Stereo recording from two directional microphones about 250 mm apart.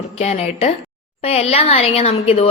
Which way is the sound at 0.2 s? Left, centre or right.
Left.